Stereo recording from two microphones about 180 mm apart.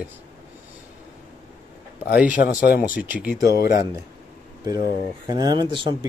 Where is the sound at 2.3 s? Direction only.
55° left (ahead or behind).